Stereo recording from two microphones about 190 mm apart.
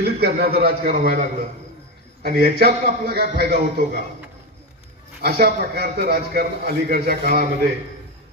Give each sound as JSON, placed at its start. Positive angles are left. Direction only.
{"t": 0.0, "sound": "a man's voice", "side_deg": -55}
{"t": 2.2, "sound": "a man's voice", "side_deg": -55}
{"t": 5.2, "sound": "a man's voice", "side_deg": -55}